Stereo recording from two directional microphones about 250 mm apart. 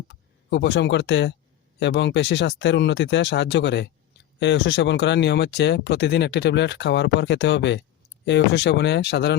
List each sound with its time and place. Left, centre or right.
0.1 s speech: left